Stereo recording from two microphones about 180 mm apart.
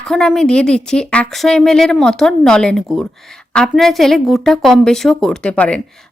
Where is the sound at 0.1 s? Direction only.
5° left (ahead or behind).